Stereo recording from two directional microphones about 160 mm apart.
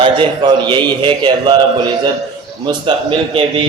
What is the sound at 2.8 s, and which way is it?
Speech, 30° right (ahead or behind).